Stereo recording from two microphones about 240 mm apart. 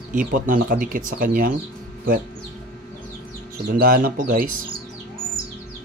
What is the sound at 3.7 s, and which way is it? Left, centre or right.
Speech, right.